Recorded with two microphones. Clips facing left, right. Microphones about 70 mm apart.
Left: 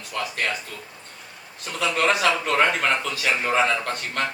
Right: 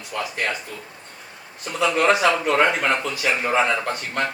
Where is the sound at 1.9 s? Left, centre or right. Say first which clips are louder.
Right 3 dB; centre.